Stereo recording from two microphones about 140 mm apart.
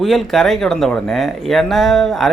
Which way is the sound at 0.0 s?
Centre (ahead or behind).